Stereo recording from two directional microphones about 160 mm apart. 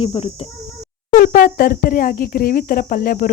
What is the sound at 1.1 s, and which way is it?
Speech, 60° left (ahead or behind).